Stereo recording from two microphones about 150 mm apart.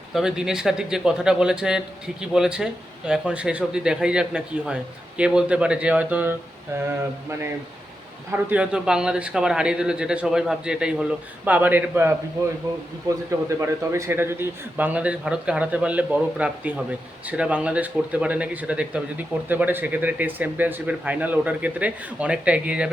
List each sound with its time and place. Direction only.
0.1 s a man's voice: 5° right (ahead or behind)
8.3 s a man's voice: 10° right (ahead or behind)